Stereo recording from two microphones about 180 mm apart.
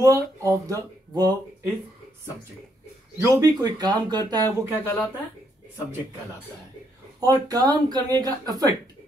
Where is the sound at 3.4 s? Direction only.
20° right (ahead or behind).